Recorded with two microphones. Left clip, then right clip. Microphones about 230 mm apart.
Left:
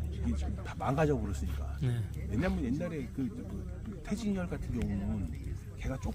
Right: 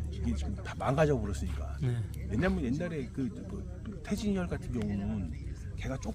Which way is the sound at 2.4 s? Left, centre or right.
Right.